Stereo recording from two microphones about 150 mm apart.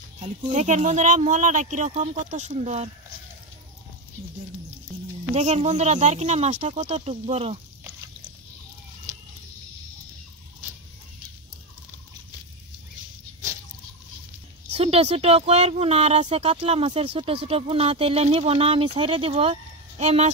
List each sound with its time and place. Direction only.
0.5 s speech: 55° right (ahead or behind)
5.3 s speech: 45° right (ahead or behind)
14.7 s speech: 45° right (ahead or behind)